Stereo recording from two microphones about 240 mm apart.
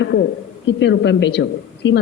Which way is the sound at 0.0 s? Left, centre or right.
Left.